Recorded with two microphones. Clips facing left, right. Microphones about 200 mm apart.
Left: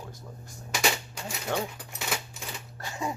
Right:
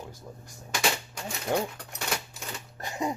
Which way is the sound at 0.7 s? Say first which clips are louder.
Even; 5° left (ahead or behind).